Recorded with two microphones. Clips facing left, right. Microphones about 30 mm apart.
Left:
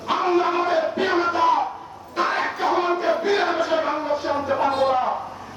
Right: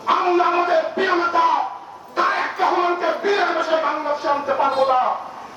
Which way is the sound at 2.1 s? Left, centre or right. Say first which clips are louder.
Right 3 dB; centre.